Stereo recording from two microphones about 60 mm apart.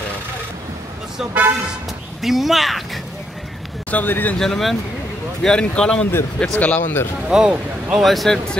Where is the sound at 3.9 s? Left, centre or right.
Left.